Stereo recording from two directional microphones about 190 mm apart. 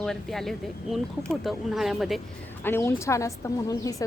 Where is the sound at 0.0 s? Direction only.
Centre (ahead or behind).